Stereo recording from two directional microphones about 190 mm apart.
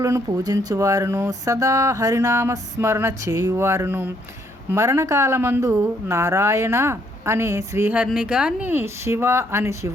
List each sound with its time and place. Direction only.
0.0 s speech: 15° right (ahead or behind)